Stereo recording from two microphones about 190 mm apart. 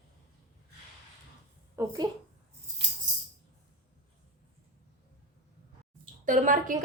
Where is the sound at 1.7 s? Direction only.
15° right (ahead or behind).